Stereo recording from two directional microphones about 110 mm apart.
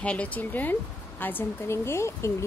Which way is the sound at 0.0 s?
10° left (ahead or behind).